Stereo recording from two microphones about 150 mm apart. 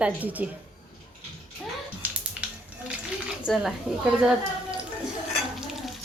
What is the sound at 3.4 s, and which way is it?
Speech, 5° right (ahead or behind).